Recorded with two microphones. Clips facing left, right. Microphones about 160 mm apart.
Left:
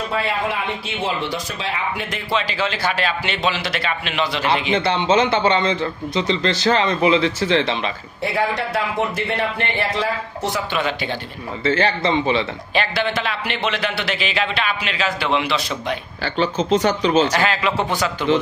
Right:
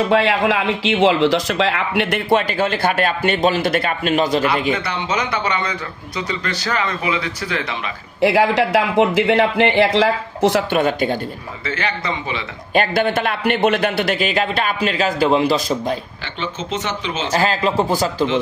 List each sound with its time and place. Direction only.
0.1 s speech: 90° right; by 4.5 s 45° right (ahead or behind)
4.7 s a man's voice: 25° left (ahead or behind)
8.2 s a man's voice: 90° right
10.7 s a man's voice: 45° right (ahead or behind)
11.6 s speech: 30° left (ahead or behind)
12.7 s a man's voice: 50° right (ahead or behind)
16.3 s speech: 35° left (ahead or behind)
17.3 s a man's voice: 30° right (ahead or behind)